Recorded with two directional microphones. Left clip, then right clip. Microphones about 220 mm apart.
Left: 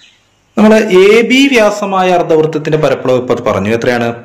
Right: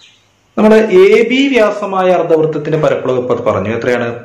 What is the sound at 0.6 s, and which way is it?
A man's voice, 45° left (ahead or behind).